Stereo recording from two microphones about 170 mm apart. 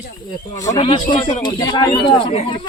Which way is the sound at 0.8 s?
30° left (ahead or behind).